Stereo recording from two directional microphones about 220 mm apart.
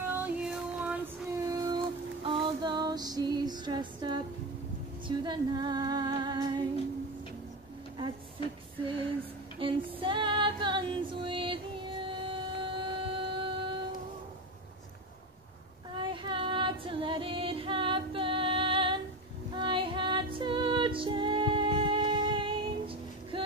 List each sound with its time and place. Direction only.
0.1 s child singing: 5° right (ahead or behind)
2.2 s female singing: 20° right (ahead or behind)
5.0 s music: 20° right (ahead or behind)
9.6 s female singing: 25° right (ahead or behind)
16.0 s child singing: 20° right (ahead or behind)
19.5 s music: 20° right (ahead or behind)